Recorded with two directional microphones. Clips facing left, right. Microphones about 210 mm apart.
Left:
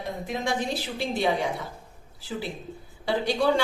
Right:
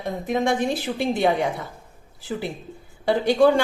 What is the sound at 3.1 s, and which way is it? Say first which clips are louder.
Speech: right 8 dB; 55° right (ahead or behind).